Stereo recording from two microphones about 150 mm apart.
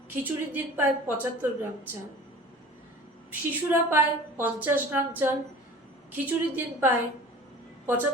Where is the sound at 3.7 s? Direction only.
15° right (ahead or behind).